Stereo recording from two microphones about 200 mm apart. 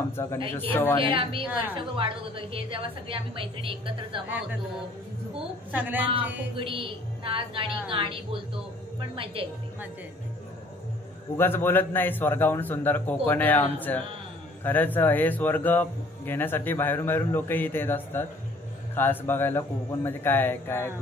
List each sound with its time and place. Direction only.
0.1 s speech: 15° left (ahead or behind)
0.9 s a woman's voice: 25° right (ahead or behind)
4.3 s a woman's voice: 5° right (ahead or behind)
5.7 s a woman's voice: 10° right (ahead or behind)
6.5 s a woman's voice: 25° right (ahead or behind)
11.3 s speech: 10° left (ahead or behind)